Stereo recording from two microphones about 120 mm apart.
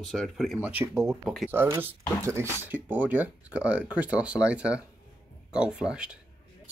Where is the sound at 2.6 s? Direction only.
15° right (ahead or behind).